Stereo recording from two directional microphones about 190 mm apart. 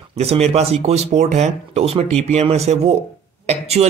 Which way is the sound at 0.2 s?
35° right (ahead or behind).